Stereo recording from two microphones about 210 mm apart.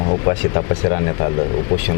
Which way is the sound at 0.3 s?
25° left (ahead or behind).